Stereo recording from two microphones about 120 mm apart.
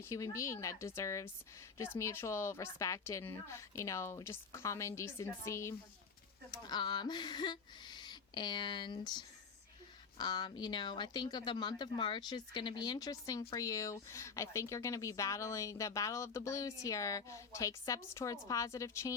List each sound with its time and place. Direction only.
0.0 s speech: 25° left (ahead or behind)
6.5 s speech: 35° left (ahead or behind)